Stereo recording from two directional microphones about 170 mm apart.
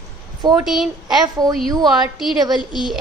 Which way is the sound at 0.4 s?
25° right (ahead or behind).